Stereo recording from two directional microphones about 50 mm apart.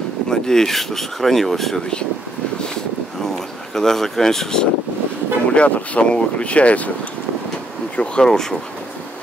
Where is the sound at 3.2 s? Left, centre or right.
Centre.